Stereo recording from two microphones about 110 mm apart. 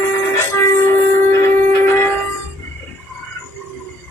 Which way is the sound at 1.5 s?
20° left (ahead or behind).